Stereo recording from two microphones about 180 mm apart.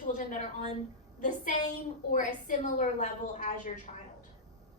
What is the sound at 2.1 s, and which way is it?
A woman's voice, 45° left (ahead or behind).